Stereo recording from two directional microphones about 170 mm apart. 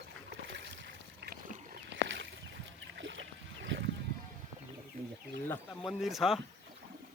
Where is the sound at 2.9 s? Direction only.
90° right.